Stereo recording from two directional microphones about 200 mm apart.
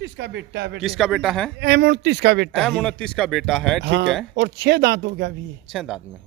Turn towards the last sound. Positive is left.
turn(degrees=0)  # may be behind; listen again after turning